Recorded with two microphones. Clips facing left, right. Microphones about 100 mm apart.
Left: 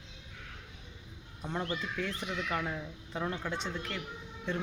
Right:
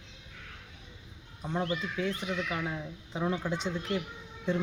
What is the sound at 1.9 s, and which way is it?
Speech, 5° right (ahead or behind).